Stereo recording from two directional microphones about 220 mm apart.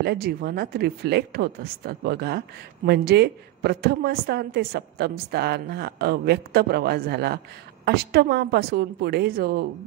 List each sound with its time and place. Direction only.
0.0 s speech: 45° right (ahead or behind)